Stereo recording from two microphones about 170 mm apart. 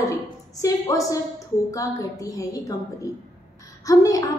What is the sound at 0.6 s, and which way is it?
A woman's voice, 20° left (ahead or behind).